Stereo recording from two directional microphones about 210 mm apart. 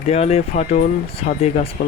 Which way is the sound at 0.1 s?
30° left (ahead or behind).